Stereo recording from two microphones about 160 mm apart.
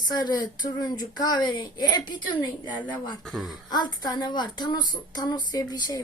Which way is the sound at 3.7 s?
25° left (ahead or behind).